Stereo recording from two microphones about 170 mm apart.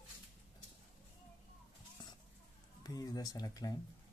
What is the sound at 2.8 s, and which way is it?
Speech, 20° left (ahead or behind).